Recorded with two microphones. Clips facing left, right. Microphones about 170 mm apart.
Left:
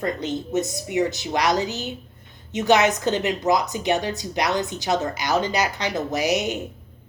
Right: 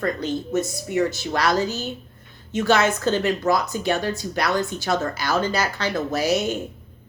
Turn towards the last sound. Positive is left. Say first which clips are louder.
# right 1 dB
turn(degrees=15)  # may be behind; listen again after turning